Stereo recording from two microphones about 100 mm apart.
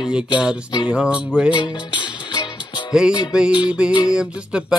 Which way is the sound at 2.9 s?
5° right (ahead or behind).